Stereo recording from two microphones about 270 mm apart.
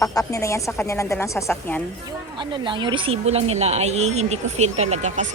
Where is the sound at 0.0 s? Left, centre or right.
Centre.